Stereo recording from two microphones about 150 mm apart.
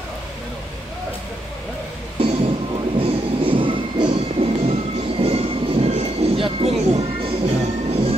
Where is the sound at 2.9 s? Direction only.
35° right (ahead or behind).